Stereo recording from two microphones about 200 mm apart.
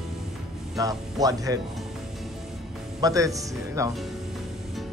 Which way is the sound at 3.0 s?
15° right (ahead or behind).